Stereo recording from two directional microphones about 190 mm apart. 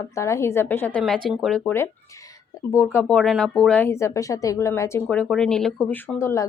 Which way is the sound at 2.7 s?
15° left (ahead or behind).